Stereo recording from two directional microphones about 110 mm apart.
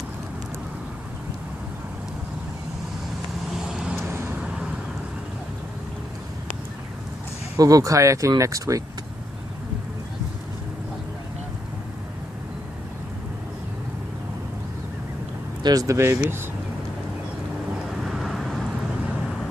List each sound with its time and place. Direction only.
3.6 s vehicle: 5° right (ahead or behind)
4.1 s vehicle: 20° right (ahead or behind)
4.4 s vehicle: 10° right (ahead or behind)
7.5 s speech: 30° right (ahead or behind)
15.6 s speech: 35° right (ahead or behind)
18.0 s vehicle: centre (ahead or behind)